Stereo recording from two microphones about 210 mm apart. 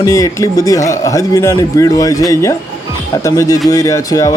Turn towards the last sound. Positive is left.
turn(degrees=15)  # may be behind; listen again after turning